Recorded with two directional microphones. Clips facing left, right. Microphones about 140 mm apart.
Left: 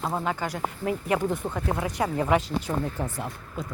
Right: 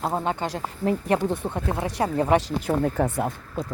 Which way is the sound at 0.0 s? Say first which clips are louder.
Right 3 dB; 25° right (ahead or behind).